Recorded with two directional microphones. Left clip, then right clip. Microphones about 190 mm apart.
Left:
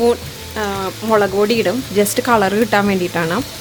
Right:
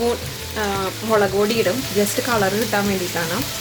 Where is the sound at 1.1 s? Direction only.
45° left (ahead or behind).